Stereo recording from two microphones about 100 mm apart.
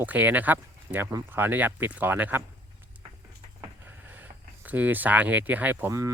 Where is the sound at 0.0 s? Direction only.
15° right (ahead or behind).